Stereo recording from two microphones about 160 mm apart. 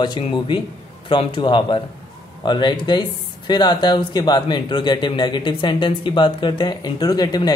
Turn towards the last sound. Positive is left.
turn(degrees=25)  # may be behind; listen again after turning